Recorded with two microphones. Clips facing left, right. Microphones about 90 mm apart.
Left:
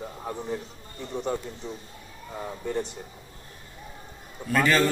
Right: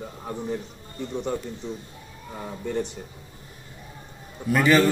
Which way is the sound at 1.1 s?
10° left (ahead or behind).